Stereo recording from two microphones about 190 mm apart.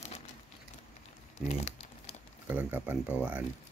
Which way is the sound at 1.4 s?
35° left (ahead or behind).